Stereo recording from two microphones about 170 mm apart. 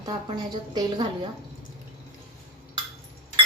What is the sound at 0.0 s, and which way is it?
A woman's voice, 25° right (ahead or behind).